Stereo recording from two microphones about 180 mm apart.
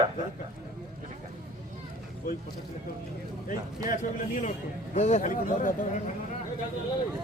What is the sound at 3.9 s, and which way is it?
Speech, 50° left (ahead or behind).